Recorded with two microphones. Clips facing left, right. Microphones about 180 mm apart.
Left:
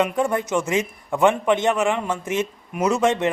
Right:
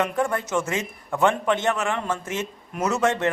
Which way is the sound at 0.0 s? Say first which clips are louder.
Left 3 dB; 15° left (ahead or behind).